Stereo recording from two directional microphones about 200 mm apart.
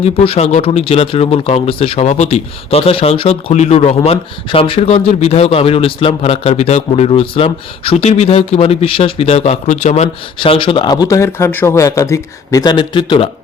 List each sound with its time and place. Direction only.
0.0 s speech: 30° left (ahead or behind)